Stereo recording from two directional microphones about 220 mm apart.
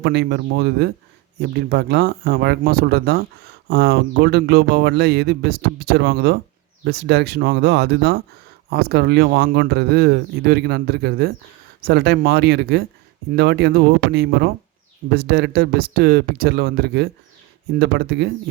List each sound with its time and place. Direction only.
0.0 s speech: 50° right (ahead or behind)